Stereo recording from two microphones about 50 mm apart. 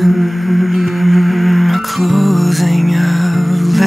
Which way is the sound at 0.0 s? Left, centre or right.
Centre.